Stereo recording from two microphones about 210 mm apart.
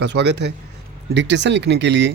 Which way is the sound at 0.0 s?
55° right (ahead or behind).